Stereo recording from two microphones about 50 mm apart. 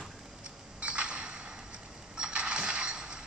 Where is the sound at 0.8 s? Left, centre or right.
Right.